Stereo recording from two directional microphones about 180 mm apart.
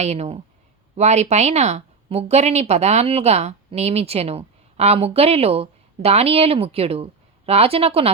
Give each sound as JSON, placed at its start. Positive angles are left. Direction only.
{"t": 0.0, "sound": "a woman's voice", "side_deg": -35}